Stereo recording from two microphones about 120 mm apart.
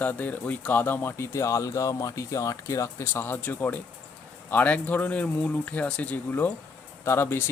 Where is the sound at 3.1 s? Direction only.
15° left (ahead or behind).